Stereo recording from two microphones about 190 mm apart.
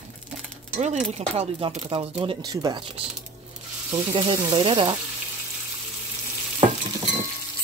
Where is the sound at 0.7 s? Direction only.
35° right (ahead or behind).